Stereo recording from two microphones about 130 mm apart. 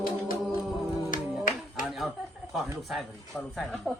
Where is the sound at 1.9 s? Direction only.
Centre (ahead or behind).